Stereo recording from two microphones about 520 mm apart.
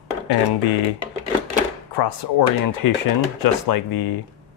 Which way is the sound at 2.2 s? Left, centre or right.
Left.